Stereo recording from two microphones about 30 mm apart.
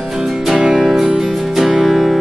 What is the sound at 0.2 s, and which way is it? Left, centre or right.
Music, centre.